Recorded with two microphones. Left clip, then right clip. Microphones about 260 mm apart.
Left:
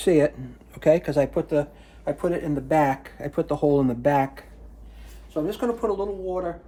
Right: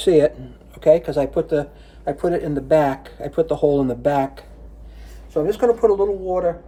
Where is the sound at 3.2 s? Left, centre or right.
Left.